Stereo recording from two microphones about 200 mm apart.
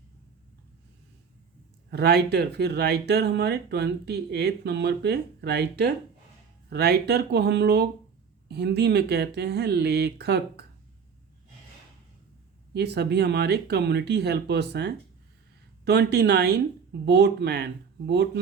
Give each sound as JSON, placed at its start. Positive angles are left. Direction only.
{"t": 1.9, "sound": "speech", "side_deg": -55}
{"t": 12.7, "sound": "speech", "side_deg": -55}